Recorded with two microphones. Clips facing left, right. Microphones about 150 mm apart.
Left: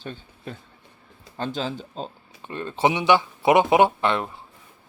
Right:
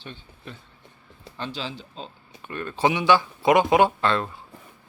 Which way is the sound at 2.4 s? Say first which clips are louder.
Left 1 dB; 25° left (ahead or behind).